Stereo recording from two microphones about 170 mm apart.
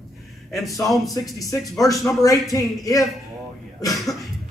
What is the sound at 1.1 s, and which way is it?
A man's voice, 20° left (ahead or behind).